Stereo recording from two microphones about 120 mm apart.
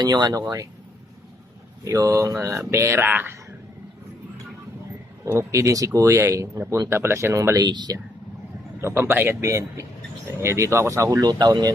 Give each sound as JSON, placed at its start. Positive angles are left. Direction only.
{"t": 0.0, "sound": "speech", "side_deg": -35}
{"t": 1.8, "sound": "speech", "side_deg": -25}
{"t": 5.2, "sound": "speech", "side_deg": -20}
{"t": 9.0, "sound": "speech", "side_deg": -15}